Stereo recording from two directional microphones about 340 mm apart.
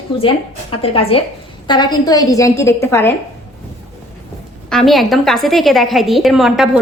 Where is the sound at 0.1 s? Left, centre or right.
Centre.